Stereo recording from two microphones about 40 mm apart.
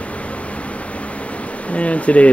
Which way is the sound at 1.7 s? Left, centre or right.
Left.